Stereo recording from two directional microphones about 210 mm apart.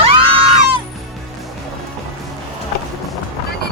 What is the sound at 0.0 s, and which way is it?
Music, 25° right (ahead or behind).